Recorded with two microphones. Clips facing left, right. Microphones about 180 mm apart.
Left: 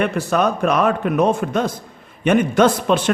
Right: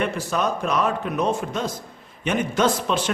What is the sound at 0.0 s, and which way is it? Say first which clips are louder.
A man's voice: left 5 dB; 60° left (ahead or behind).